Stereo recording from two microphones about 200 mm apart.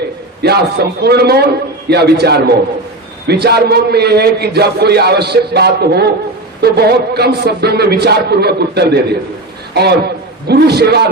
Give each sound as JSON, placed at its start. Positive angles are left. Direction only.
{"t": 0.4, "sound": "a man's voice", "side_deg": -55}
{"t": 10.5, "sound": "a man's voice", "side_deg": -55}